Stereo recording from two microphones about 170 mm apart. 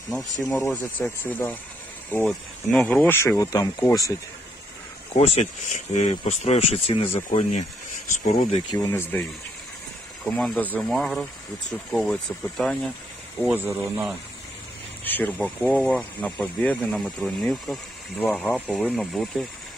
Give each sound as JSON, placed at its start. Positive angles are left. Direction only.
{"t": 0.5, "sound": "speech", "side_deg": 0}
{"t": 5.1, "sound": "speech", "side_deg": 40}
{"t": 8.3, "sound": "speech", "side_deg": 35}
{"t": 8.7, "sound": "speech", "side_deg": 15}
{"t": 10.2, "sound": "speech", "side_deg": 0}
{"t": 13.4, "sound": "speech", "side_deg": -10}
{"t": 15.0, "sound": "speech", "side_deg": 10}